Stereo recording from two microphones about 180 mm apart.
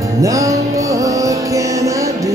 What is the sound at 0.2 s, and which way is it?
Music, 20° right (ahead or behind).